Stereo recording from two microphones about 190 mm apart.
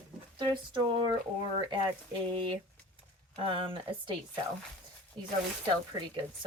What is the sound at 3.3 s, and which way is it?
Speech, 25° right (ahead or behind).